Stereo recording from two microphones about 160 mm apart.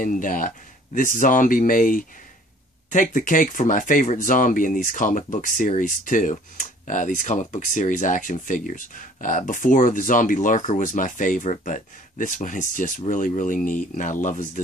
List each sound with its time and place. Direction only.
0.0 s speech: 55° left (ahead or behind)